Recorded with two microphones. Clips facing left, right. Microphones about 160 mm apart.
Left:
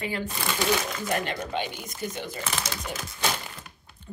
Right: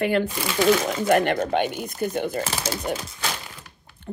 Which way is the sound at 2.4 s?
30° right (ahead or behind).